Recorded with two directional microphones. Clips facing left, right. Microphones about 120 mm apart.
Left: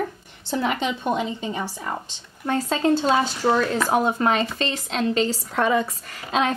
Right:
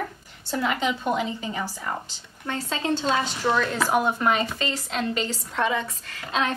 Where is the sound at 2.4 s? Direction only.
45° left (ahead or behind).